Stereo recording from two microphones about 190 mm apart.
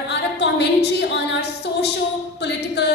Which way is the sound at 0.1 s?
65° left (ahead or behind).